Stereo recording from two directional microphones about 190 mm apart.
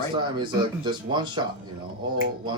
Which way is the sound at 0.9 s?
25° right (ahead or behind).